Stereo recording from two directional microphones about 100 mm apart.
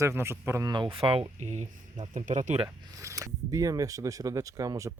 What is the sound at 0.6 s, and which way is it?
Speech, 50° right (ahead or behind).